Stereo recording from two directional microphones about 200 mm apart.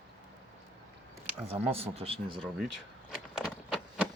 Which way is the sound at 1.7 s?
30° right (ahead or behind).